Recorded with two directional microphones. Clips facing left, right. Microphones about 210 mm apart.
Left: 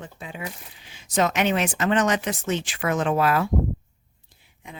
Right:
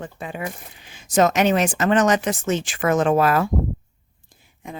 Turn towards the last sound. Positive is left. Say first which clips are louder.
# right 7 dB
turn(degrees=-45)  # may be behind; listen again after turning